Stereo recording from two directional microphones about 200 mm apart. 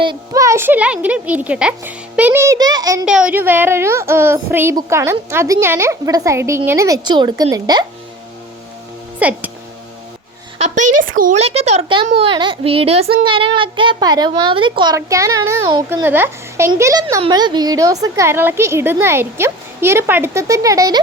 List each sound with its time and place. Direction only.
0.0 s a child's voice: 20° right (ahead or behind)
3.1 s a child's voice: 5° right (ahead or behind); by 7.9 s 20° right (ahead or behind)
9.1 s speech: 5° right (ahead or behind)
11.2 s a child's voice: 35° right (ahead or behind); by 21.0 s 15° right (ahead or behind)